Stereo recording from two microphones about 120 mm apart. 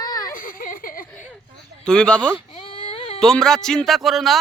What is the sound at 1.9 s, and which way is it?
Speech, 5° left (ahead or behind).